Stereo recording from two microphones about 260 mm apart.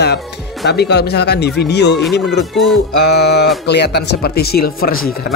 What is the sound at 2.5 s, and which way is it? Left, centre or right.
Music, centre.